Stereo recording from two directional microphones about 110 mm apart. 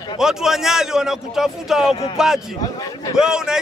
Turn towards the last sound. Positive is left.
turn(degrees=-5)  # may be behind; listen again after turning